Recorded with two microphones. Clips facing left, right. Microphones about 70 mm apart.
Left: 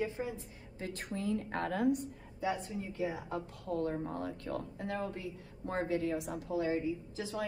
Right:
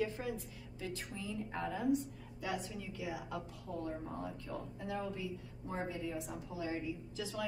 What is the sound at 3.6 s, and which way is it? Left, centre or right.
A woman's voice, left.